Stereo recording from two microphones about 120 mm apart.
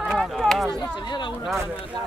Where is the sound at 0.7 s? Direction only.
35° left (ahead or behind).